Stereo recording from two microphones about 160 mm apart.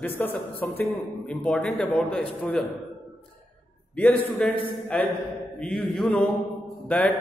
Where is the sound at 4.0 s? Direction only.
5° left (ahead or behind).